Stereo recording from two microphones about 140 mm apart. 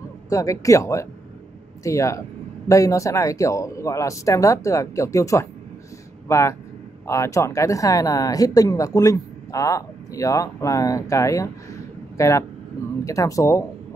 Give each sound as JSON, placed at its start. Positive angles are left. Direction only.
{"t": 0.3, "sound": "speech", "side_deg": 20}